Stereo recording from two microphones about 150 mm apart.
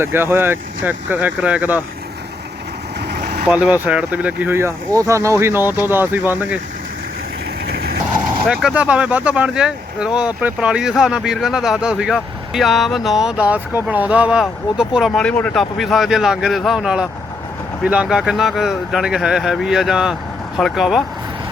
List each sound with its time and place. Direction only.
0.0 s speech: 15° right (ahead or behind)
3.0 s vehicle: 90° right
3.5 s speech: 10° right (ahead or behind)
7.6 s a sound: 90° right
8.4 s speech: 5° right (ahead or behind)